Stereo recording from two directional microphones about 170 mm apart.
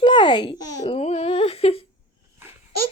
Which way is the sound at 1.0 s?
35° left (ahead or behind).